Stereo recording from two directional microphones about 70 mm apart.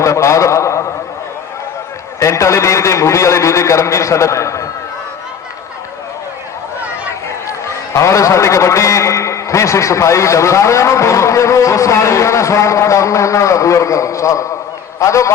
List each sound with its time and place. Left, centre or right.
0.0 s a sound: left
2.1 s a man's voice: left
7.7 s a man's voice: left